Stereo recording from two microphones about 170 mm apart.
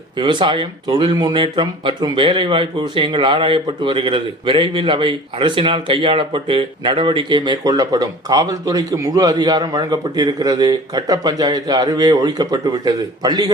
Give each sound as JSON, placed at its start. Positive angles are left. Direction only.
{"t": 0.2, "sound": "speech", "side_deg": -30}